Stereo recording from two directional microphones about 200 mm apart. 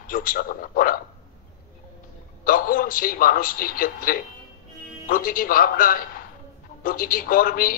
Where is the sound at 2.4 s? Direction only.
45° left (ahead or behind).